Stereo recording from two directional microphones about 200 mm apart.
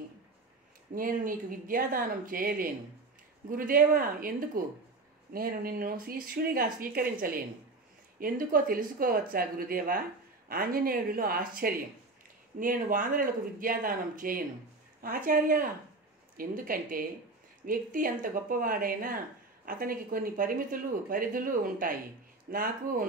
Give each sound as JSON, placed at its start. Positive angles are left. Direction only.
{"t": 0.9, "sound": "speech", "side_deg": -45}